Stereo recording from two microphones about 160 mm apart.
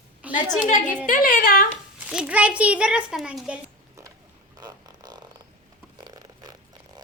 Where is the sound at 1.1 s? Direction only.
60° left (ahead or behind).